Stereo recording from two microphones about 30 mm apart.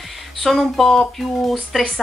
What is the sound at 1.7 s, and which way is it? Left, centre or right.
Speech, centre.